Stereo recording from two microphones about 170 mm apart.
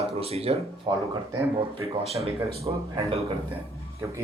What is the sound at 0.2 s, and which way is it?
A man's voice, 35° right (ahead or behind).